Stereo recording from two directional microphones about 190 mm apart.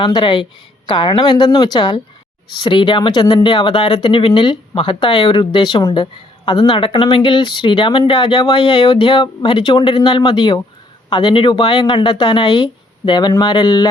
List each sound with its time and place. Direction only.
0.0 s speech: 25° left (ahead or behind)